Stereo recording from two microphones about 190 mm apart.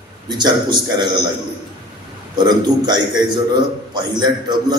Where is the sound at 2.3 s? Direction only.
20° right (ahead or behind).